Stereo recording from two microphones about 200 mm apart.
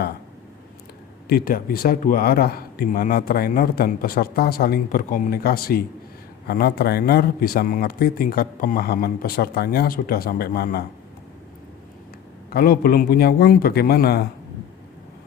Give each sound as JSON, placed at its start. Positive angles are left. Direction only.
{"t": 1.3, "sound": "speech", "side_deg": 45}
{"t": 12.5, "sound": "speech", "side_deg": 45}